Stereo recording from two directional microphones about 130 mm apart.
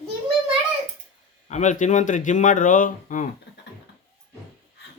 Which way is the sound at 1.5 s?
70° left (ahead or behind).